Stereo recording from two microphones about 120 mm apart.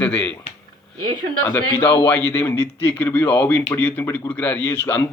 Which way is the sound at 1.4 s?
15° left (ahead or behind).